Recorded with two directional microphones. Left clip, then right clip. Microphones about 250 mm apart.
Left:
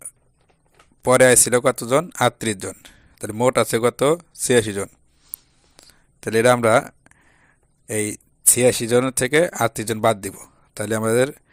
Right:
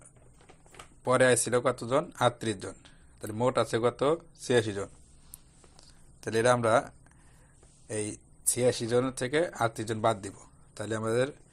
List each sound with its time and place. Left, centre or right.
1.0 s speech: left
5.3 s a sound: left
7.9 s speech: left